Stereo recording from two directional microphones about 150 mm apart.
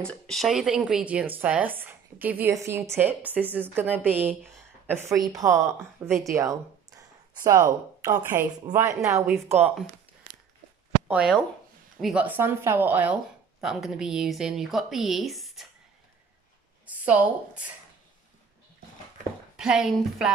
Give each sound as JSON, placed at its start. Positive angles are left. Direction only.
{"t": 0.0, "sound": "a woman's voice", "side_deg": 5}
{"t": 11.1, "sound": "a woman's voice", "side_deg": -5}
{"t": 16.8, "sound": "a woman's voice", "side_deg": -10}
{"t": 19.5, "sound": "a woman's voice", "side_deg": -5}